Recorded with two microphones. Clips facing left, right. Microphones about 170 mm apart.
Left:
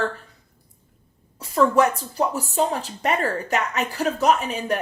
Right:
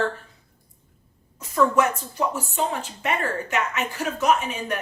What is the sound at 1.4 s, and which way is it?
A woman's voice, 35° left (ahead or behind).